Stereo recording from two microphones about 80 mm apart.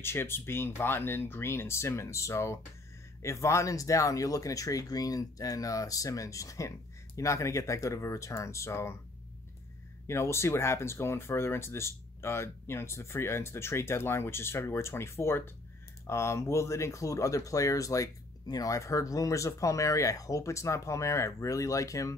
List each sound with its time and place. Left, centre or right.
0.0 s speech: left
10.0 s speech: left